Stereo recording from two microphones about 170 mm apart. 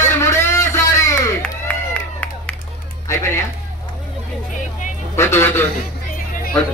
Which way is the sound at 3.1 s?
15° left (ahead or behind).